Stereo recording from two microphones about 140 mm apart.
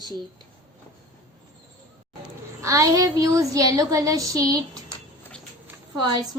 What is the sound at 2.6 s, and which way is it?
A child's voice, 25° right (ahead or behind).